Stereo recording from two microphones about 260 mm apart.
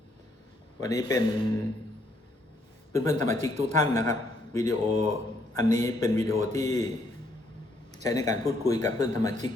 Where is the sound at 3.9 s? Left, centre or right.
Centre.